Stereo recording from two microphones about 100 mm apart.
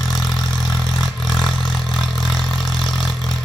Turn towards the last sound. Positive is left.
turn(degrees=0)  # may be behind; listen again after turning